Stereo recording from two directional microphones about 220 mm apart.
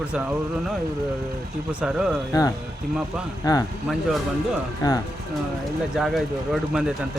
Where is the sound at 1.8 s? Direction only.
5° right (ahead or behind).